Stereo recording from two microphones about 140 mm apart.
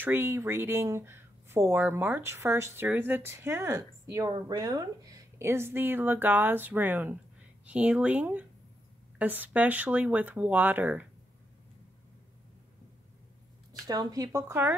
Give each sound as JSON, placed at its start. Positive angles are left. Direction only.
{"t": 0.0, "sound": "speech", "side_deg": -15}
{"t": 13.8, "sound": "speech", "side_deg": -25}